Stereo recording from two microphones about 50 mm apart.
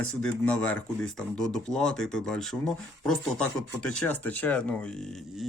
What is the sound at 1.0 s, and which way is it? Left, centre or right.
Speech, centre.